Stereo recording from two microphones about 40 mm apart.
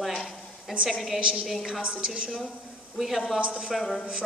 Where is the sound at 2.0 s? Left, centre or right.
Right.